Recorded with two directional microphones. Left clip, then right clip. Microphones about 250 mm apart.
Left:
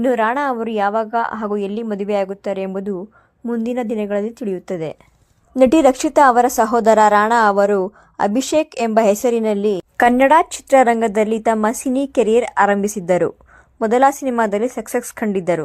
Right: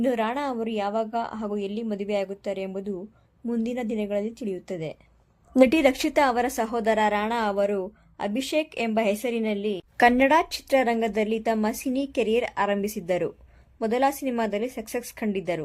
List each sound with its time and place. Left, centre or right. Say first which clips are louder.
0.0 s speech: left 9 dB; centre
10.0 s speech: left 7 dB; centre